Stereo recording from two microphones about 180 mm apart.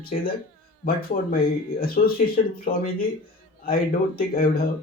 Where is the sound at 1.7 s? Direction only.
55° left (ahead or behind).